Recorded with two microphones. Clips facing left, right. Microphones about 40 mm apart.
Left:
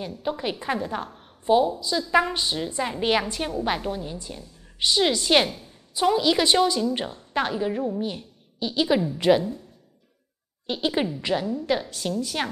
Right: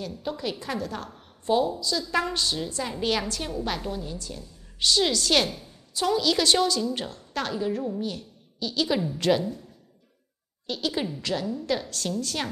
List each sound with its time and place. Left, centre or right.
0.2 s a woman's voice: left
5.5 s a sound: centre
6.0 s a woman's voice: left
10.7 s a woman's voice: left